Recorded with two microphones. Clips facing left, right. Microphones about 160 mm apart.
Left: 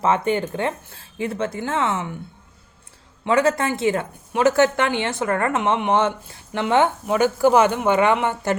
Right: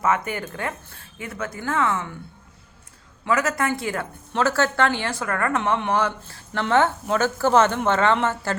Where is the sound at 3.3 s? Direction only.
30° left (ahead or behind).